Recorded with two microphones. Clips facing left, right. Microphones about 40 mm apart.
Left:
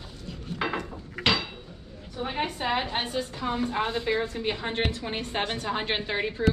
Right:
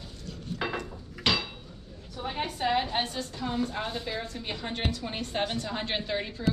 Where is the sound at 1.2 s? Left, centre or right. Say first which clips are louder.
Left 2 dB; centre.